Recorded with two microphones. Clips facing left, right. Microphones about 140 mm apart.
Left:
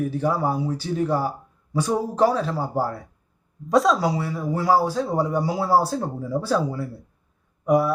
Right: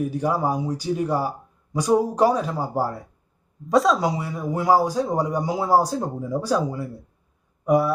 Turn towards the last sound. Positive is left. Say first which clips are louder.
# even
turn(degrees=0)  # may be behind; listen again after turning